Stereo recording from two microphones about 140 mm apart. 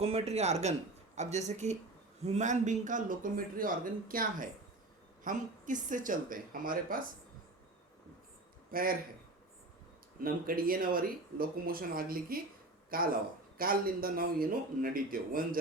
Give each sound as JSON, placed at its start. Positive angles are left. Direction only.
{"t": 0.0, "sound": "speech", "side_deg": -45}
{"t": 5.2, "sound": "speech", "side_deg": -65}
{"t": 8.7, "sound": "speech", "side_deg": -90}
{"t": 10.2, "sound": "speech", "side_deg": -90}